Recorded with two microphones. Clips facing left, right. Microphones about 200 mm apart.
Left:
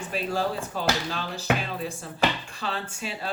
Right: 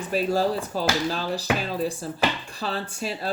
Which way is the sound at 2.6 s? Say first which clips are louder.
Right 4 dB; 40° right (ahead or behind).